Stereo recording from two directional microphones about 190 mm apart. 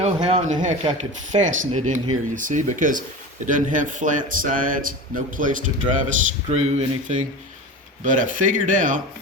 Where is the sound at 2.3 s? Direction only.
40° right (ahead or behind).